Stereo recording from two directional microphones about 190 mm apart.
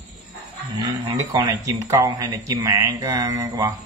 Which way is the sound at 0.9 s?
15° right (ahead or behind).